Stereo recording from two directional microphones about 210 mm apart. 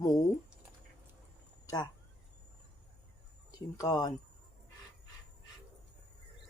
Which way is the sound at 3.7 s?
15° left (ahead or behind).